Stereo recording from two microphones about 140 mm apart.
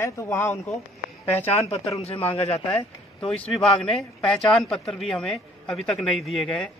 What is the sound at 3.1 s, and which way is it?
Speech, 10° left (ahead or behind).